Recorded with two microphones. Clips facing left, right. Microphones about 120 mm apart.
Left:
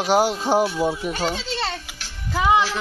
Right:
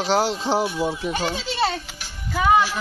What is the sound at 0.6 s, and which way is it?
Child singing, 15° right (ahead or behind).